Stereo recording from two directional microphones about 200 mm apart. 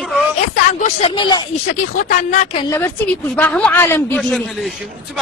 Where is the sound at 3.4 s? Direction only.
5° left (ahead or behind).